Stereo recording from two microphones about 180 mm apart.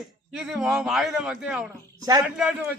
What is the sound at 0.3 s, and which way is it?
A man's voice, 5° right (ahead or behind).